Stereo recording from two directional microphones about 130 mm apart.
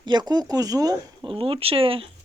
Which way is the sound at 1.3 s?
45° right (ahead or behind).